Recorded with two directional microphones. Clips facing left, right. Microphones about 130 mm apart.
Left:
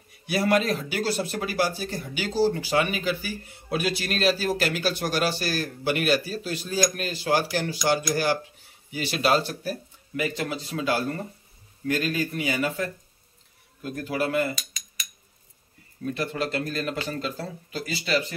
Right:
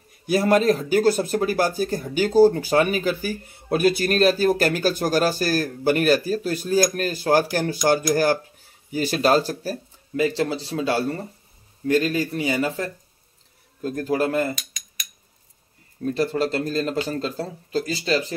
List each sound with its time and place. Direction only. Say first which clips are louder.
0.3 s speech: right 5 dB; 40° right (ahead or behind)
16.0 s speech: right 6 dB; 35° right (ahead or behind)